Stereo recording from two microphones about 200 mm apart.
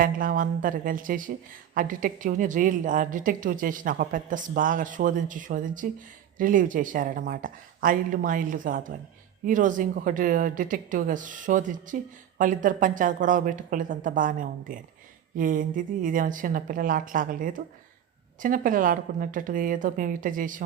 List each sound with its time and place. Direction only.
0.0 s a woman's voice: 45° right (ahead or behind)